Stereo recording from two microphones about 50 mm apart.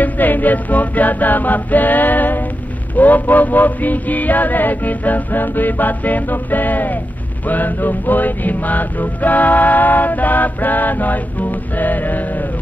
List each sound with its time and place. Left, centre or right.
0.0 s music: left